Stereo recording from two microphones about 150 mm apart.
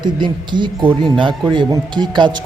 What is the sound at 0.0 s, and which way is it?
Speech, 30° right (ahead or behind).